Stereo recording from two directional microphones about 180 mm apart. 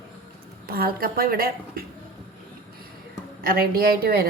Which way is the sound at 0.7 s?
55° right (ahead or behind).